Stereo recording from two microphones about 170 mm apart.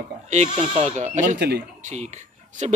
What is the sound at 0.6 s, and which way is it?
Speech, 35° right (ahead or behind).